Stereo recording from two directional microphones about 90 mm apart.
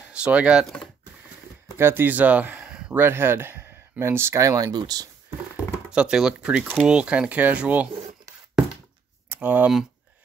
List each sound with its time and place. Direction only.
0.0 s speech: 10° right (ahead or behind)
1.8 s speech: 25° right (ahead or behind)
2.9 s speech: 25° right (ahead or behind); by 5.0 s 45° right (ahead or behind)
5.9 s speech: 10° right (ahead or behind)
9.3 s speech: 20° right (ahead or behind)